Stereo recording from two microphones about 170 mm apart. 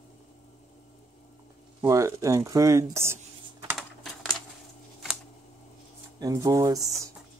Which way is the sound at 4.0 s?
Centre (ahead or behind).